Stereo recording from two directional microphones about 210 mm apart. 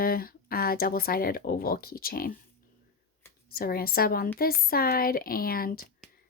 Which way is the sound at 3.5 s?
45° left (ahead or behind).